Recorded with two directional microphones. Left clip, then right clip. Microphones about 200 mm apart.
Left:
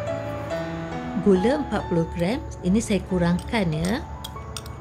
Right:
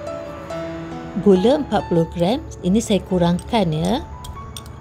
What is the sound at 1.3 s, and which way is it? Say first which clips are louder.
Speech: right 6 dB; 20° right (ahead or behind).